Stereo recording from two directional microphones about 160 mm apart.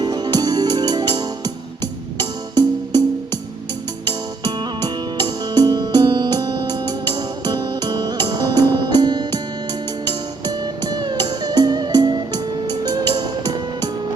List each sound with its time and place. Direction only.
0.0 s music: 25° right (ahead or behind)
5.1 s music: 25° right (ahead or behind)
10.8 s music: 25° right (ahead or behind)